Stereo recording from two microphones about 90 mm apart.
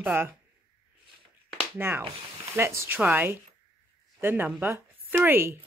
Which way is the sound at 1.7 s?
25° right (ahead or behind).